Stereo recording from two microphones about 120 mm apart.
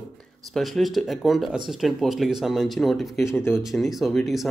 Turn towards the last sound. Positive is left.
turn(degrees=0)  # may be behind; listen again after turning